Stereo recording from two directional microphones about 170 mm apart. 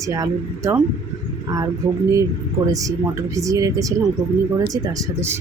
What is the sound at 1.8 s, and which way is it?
Speech, 20° right (ahead or behind).